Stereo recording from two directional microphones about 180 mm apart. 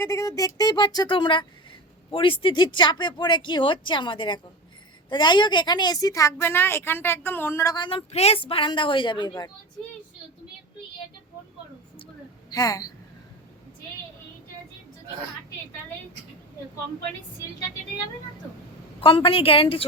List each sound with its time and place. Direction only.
0.0 s a woman's voice: 15° left (ahead or behind)
12.5 s a woman's voice: 20° left (ahead or behind)
18.9 s a woman's voice: 30° left (ahead or behind)